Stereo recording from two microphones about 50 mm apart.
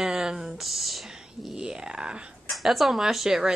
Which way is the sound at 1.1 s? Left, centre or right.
Centre.